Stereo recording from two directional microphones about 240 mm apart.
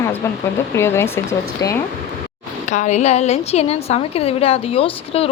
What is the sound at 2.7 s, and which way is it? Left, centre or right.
A woman's voice, left.